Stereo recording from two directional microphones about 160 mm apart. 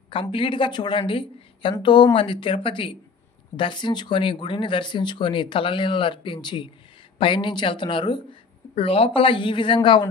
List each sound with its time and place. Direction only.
0.1 s speech: 30° left (ahead or behind)